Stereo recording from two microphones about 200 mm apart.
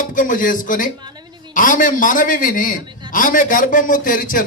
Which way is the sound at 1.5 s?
40° left (ahead or behind).